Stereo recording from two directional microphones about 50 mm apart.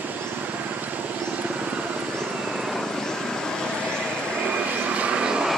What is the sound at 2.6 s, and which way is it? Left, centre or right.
Vehicle, centre.